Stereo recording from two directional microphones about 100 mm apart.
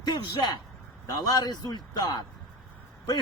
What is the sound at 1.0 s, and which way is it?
A man's voice, 35° left (ahead or behind).